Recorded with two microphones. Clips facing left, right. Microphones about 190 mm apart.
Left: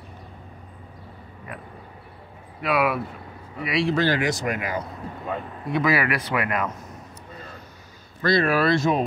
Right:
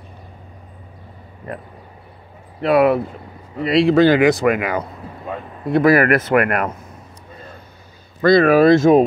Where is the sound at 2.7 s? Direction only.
55° right (ahead or behind).